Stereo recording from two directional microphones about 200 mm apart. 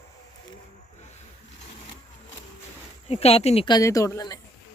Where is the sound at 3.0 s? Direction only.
30° left (ahead or behind).